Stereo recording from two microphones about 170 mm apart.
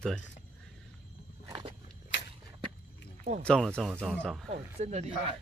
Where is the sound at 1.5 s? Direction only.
30° right (ahead or behind).